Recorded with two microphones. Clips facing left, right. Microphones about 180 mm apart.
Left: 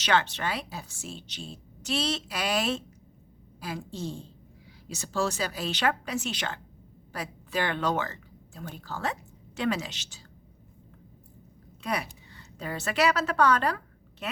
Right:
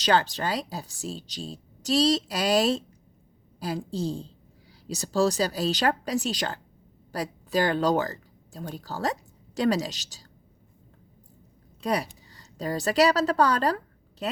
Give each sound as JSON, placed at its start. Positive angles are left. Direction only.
{"t": 0.0, "sound": "speech", "side_deg": -35}
{"t": 11.8, "sound": "a woman's voice", "side_deg": -35}